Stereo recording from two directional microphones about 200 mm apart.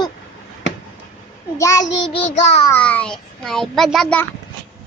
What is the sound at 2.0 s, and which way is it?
Child singing, 30° left (ahead or behind).